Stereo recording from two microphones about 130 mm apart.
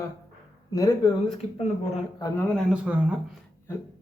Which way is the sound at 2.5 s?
5° left (ahead or behind).